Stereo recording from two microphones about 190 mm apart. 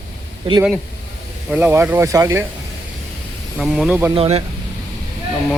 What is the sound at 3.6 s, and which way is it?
Speech, 5° right (ahead or behind).